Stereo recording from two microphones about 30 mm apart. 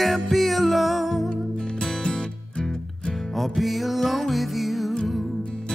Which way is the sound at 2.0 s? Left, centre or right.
Left.